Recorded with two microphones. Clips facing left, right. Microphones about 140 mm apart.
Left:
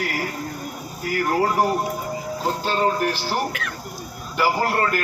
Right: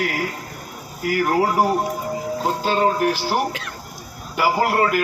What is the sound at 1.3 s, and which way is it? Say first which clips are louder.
Speech: right 1 dB; 10° right (ahead or behind).